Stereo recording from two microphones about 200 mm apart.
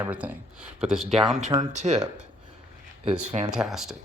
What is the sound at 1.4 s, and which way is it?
Speech, 35° right (ahead or behind).